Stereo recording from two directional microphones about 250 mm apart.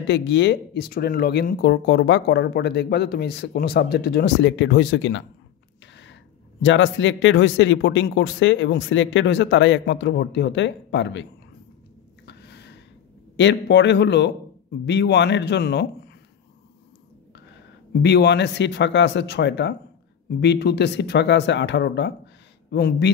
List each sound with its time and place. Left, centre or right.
0.0 s speech: left
6.6 s speech: left
12.3 s a sound: left
13.4 s speech: left
18.0 s speech: left